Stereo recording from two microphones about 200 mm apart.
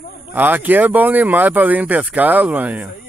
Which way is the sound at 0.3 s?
10° right (ahead or behind).